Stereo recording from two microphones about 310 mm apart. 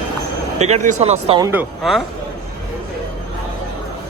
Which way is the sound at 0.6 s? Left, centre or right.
Right.